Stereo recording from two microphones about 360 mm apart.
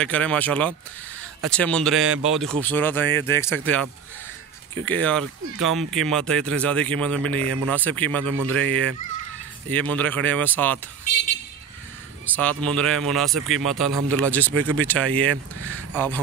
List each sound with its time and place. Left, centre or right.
0.0 s a man's voice: centre
12.4 s a man's voice: centre
14.5 s speech: right
14.8 s a man's voice: centre
15.0 s speech: right
15.9 s a man's voice: centre